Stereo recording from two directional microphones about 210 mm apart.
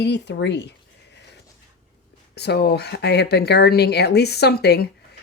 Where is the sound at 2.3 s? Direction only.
50° left (ahead or behind).